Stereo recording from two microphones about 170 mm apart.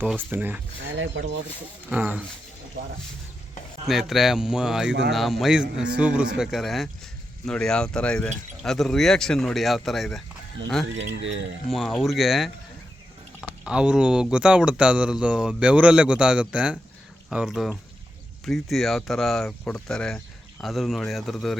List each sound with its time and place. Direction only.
0.0 s speech: 10° right (ahead or behind)
0.9 s speech: 90° right
1.9 s speech: 10° right (ahead or behind)
3.8 s speech: centre (ahead or behind)
4.9 s speech: 90° right
5.1 s speech: centre (ahead or behind)
10.9 s speech: 90° right
11.7 s speech: centre (ahead or behind)
13.7 s speech: 5° right (ahead or behind)